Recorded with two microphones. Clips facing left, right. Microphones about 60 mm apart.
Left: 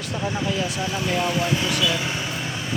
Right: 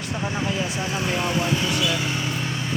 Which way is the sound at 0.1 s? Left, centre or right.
Centre.